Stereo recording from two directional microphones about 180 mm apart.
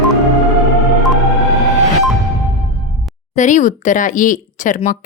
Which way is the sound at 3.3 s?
45° left (ahead or behind).